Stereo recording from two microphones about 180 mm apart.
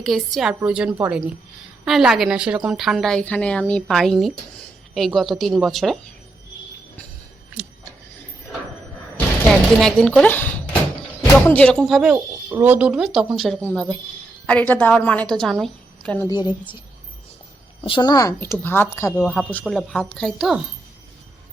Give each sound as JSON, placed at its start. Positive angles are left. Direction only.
{"t": 0.0, "sound": "speech", "side_deg": 0}
{"t": 7.6, "sound": "vehicle", "side_deg": 0}
{"t": 9.1, "sound": "a sound", "side_deg": 5}
{"t": 11.4, "sound": "a woman's voice", "side_deg": 5}
{"t": 16.2, "sound": "a woman's voice", "side_deg": 25}
{"t": 17.8, "sound": "a woman's voice", "side_deg": 25}